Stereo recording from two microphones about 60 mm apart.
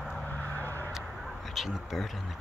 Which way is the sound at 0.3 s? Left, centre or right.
Left.